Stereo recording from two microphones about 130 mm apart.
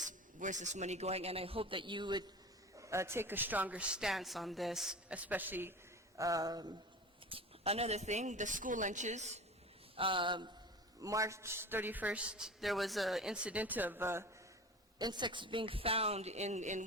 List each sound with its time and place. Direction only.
0.0 s a man's voice: 75° right (ahead or behind); by 2.2 s 35° right (ahead or behind)
2.7 s a man's voice: 25° right (ahead or behind)
6.1 s a sound: 25° right (ahead or behind)
7.3 s a woman's voice: 45° right (ahead or behind)
9.9 s speech: 40° right (ahead or behind)
11.0 s a man's voice: 25° right (ahead or behind)
14.9 s a man's voice: 35° right (ahead or behind); by 16.8 s 65° right (ahead or behind)